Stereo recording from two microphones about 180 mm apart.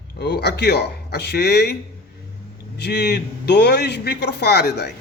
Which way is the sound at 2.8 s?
65° left (ahead or behind).